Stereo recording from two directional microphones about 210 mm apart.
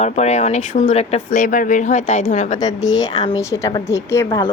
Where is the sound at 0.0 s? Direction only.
35° left (ahead or behind).